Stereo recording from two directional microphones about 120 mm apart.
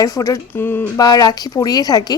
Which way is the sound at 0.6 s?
20° left (ahead or behind).